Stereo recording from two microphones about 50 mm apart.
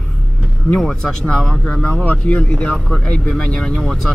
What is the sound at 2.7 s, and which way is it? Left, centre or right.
Speech, centre.